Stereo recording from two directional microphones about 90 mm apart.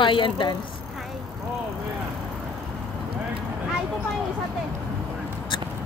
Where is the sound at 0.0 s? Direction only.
70° left (ahead or behind).